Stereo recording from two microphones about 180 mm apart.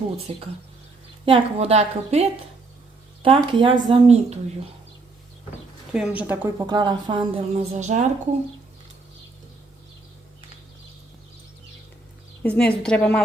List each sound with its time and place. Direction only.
0.3 s speech: 35° right (ahead or behind)
3.2 s speech: 30° right (ahead or behind)
5.9 s speech: 5° right (ahead or behind)
6.7 s speech: 25° right (ahead or behind); by 8.0 s 40° right (ahead or behind)
12.4 s a woman's voice: 5° left (ahead or behind)